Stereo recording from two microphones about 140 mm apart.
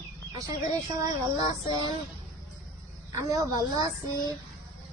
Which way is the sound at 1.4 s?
30° right (ahead or behind).